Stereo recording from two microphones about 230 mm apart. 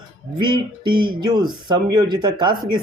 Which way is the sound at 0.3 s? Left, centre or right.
Centre.